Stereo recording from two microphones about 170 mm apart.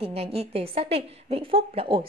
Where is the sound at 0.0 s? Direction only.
35° right (ahead or behind).